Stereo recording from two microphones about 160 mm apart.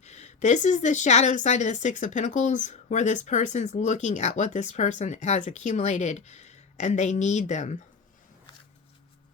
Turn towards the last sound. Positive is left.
turn(degrees=45)  # may be behind; listen again after turning